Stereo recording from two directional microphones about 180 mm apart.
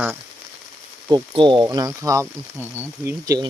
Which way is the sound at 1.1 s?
25° right (ahead or behind).